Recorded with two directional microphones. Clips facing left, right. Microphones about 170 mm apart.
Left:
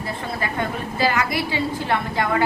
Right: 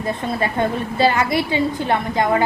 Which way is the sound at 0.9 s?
25° right (ahead or behind).